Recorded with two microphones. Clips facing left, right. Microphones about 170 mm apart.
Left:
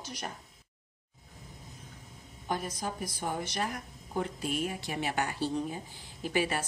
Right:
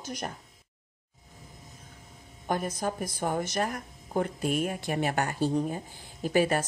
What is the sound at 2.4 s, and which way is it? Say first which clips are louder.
A woman's voice: right 5 dB; 50° right (ahead or behind).